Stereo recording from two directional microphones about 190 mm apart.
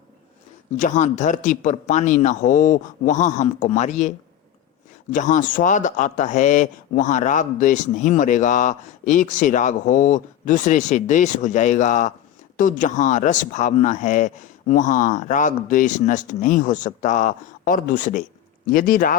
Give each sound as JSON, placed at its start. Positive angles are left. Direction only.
{"t": 0.8, "sound": "speech", "side_deg": 40}
{"t": 5.1, "sound": "speech", "side_deg": 40}